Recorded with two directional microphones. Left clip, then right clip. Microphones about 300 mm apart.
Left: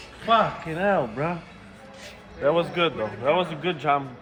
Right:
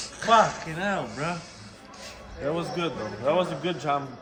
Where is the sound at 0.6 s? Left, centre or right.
Centre.